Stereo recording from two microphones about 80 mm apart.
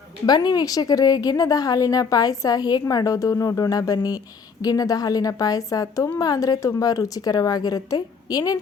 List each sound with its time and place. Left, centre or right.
0.3 s a woman's voice: left
2.8 s a woman's voice: left